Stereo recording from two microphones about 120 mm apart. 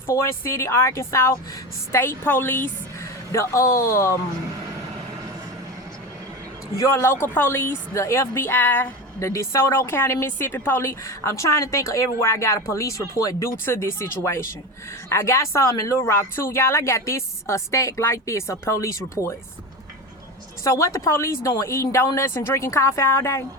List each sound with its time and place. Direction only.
0.1 s speech: 20° left (ahead or behind)
6.7 s speech: 20° left (ahead or behind)
20.7 s speech: 25° left (ahead or behind)